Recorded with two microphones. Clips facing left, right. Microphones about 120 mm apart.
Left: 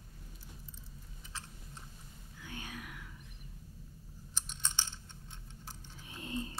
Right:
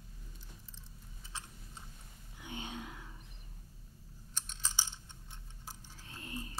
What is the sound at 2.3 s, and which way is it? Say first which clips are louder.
Whispering: right 2 dB; 20° right (ahead or behind).